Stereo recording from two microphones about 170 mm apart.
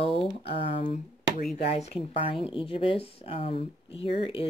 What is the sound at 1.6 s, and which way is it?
Speech, 40° left (ahead or behind).